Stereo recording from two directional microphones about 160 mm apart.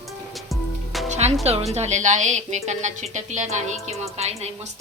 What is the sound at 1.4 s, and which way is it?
A woman's voice, 40° right (ahead or behind).